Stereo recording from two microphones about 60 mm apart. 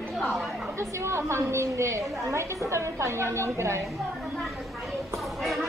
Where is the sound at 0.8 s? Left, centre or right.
Right.